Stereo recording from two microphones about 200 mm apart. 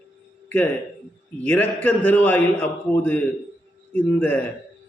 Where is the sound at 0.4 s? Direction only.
10° left (ahead or behind).